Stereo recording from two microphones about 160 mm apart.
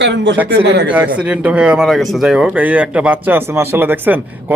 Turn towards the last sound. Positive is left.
turn(degrees=-10)  # may be behind; listen again after turning